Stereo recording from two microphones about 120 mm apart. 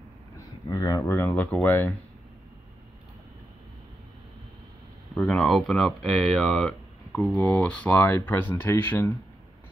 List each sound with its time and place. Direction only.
0.4 s a sound: 30° left (ahead or behind)
1.1 s speech: 15° left (ahead or behind)
5.1 s speech: 5° left (ahead or behind)